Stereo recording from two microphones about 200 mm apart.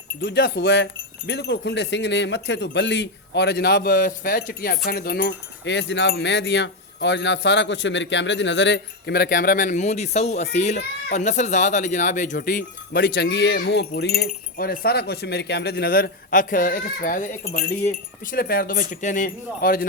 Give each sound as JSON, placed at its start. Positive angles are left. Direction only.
{"t": 0.2, "sound": "wind chime", "side_deg": 55}
{"t": 10.5, "sound": "speech", "side_deg": 35}
{"t": 13.0, "sound": "wind chime", "side_deg": 60}
{"t": 13.6, "sound": "speech", "side_deg": 55}